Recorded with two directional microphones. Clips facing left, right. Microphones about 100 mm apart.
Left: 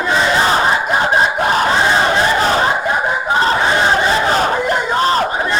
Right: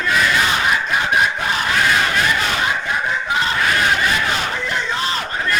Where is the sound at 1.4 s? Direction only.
35° left (ahead or behind).